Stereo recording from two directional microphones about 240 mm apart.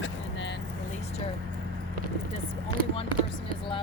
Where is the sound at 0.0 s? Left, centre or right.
Left.